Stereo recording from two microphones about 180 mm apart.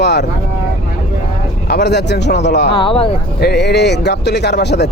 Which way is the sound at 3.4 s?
65° left (ahead or behind).